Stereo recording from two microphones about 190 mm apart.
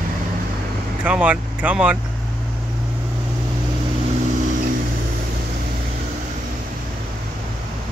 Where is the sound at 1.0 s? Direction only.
5° right (ahead or behind).